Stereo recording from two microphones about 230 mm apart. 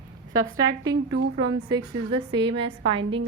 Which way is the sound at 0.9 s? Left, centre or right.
Right.